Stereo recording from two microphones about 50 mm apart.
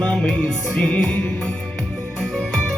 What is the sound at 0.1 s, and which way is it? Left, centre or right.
Music, centre.